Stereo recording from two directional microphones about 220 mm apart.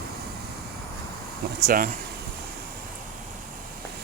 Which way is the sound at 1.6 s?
40° right (ahead or behind).